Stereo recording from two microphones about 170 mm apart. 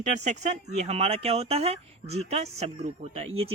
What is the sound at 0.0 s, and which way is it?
Speech, 45° right (ahead or behind).